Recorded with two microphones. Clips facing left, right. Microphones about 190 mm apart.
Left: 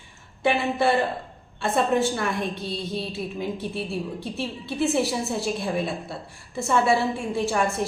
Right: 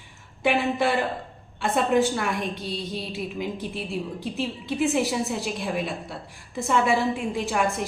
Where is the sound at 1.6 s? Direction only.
15° right (ahead or behind).